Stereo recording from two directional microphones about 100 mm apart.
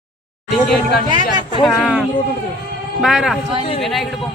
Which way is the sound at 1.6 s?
5° left (ahead or behind).